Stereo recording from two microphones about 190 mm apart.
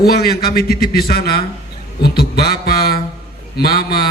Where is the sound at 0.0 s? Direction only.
55° left (ahead or behind).